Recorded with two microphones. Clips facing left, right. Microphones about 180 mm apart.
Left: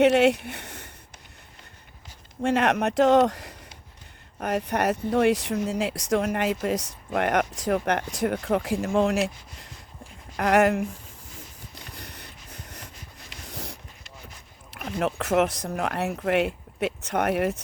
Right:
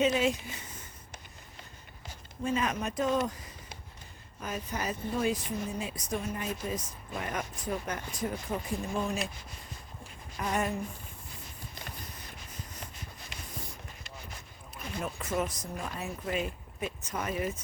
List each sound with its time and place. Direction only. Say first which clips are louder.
0.0 s speech: left 9 dB; 70° left (ahead or behind)
2.4 s speech: left 8 dB; 75° left (ahead or behind)
11.9 s snort: left 3 dB; 75° left (ahead or behind)
13.5 s a sound: left 8 dB; 90° left
14.7 s speech: left 10 dB; 75° left (ahead or behind)